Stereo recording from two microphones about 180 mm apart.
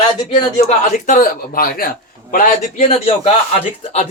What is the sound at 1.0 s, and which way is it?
Speech, 45° left (ahead or behind).